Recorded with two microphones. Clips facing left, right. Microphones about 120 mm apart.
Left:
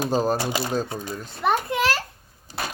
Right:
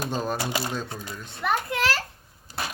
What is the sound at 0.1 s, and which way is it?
Speech, 35° left (ahead or behind).